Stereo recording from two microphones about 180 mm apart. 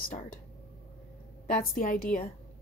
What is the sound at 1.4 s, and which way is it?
Speech, 50° left (ahead or behind).